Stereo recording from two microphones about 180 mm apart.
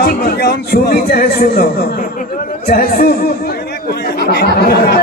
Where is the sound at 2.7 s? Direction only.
55° left (ahead or behind).